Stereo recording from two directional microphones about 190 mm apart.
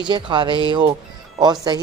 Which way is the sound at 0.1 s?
25° right (ahead or behind).